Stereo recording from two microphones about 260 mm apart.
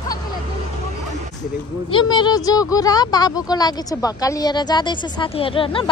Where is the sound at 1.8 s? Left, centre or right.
Centre.